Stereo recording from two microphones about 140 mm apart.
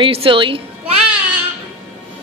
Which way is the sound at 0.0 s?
40° right (ahead or behind).